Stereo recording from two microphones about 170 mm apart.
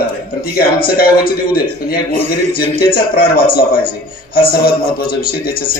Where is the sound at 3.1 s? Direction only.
60° left (ahead or behind).